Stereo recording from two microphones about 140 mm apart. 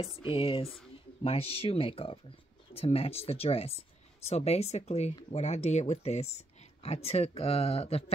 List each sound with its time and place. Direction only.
0.0 s speech: 40° left (ahead or behind)